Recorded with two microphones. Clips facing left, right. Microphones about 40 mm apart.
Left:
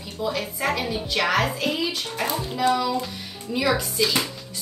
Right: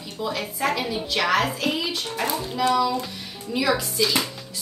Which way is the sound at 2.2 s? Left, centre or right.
Left.